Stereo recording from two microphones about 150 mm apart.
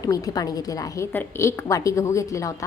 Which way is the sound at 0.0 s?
25° left (ahead or behind).